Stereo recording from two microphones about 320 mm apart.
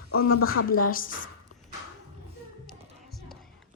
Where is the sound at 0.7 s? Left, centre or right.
Left.